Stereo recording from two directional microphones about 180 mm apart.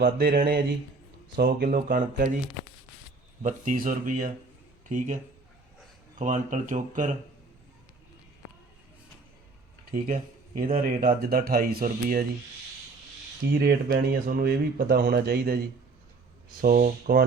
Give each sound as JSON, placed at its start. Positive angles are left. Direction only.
{"t": 0.0, "sound": "speech", "side_deg": -55}
{"t": 3.4, "sound": "speech", "side_deg": -45}
{"t": 6.1, "sound": "speech", "side_deg": -45}
{"t": 9.9, "sound": "speech", "side_deg": -50}
{"t": 13.5, "sound": "speech", "side_deg": -65}